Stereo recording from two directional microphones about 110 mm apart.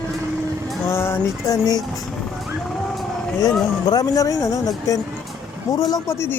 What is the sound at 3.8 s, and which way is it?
Speech, 35° left (ahead or behind).